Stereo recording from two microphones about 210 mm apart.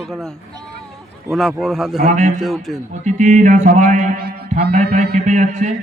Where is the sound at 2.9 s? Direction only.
35° right (ahead or behind).